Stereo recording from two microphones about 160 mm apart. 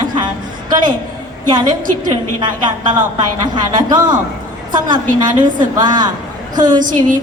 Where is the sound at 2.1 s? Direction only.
30° right (ahead or behind).